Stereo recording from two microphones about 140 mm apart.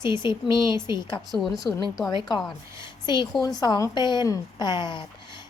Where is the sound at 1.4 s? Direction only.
Centre (ahead or behind).